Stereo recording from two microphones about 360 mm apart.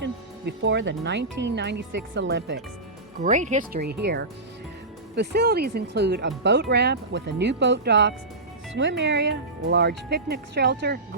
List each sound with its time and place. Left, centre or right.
0.0 s speech: right